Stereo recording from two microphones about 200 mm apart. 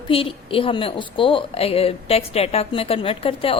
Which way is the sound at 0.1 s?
25° left (ahead or behind).